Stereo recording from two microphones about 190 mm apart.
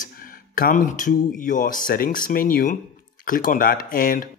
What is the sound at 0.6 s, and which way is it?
Speech, 45° left (ahead or behind).